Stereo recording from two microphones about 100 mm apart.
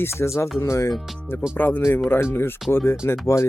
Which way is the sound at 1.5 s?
20° left (ahead or behind).